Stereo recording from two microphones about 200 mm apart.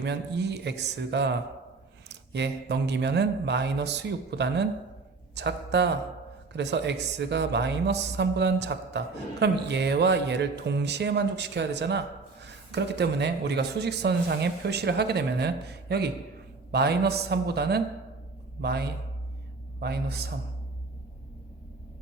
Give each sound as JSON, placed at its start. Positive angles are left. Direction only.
{"t": 0.0, "sound": "a man's voice", "side_deg": -60}